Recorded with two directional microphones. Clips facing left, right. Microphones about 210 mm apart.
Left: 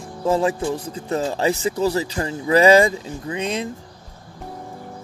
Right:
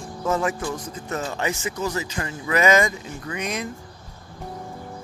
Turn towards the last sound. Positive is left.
turn(degrees=30)  # may be behind; listen again after turning